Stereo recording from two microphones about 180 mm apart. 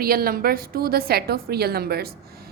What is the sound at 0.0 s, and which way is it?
A woman's voice, 55° right (ahead or behind).